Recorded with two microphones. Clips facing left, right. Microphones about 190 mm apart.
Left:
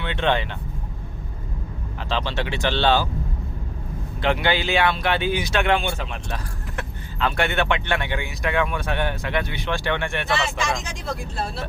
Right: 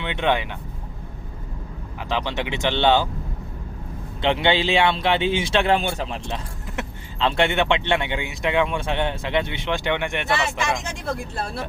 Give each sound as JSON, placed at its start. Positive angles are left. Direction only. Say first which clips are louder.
{"t": 0.0, "sound": "speech", "louder": "even", "side_deg": -15}
{"t": 2.0, "sound": "speech", "louder": "right 1 dB", "side_deg": -15}
{"t": 4.2, "sound": "speech", "louder": "right 2 dB", "side_deg": -25}
{"t": 6.2, "sound": "speech", "louder": "right 1 dB", "side_deg": -25}